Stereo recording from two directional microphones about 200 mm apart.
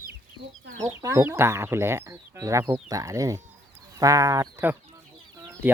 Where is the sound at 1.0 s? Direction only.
15° right (ahead or behind).